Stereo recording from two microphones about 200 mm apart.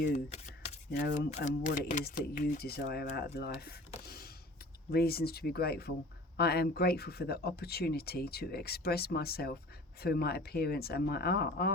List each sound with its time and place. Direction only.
1.0 s speech: 50° left (ahead or behind)
1.3 s speech: 40° left (ahead or behind)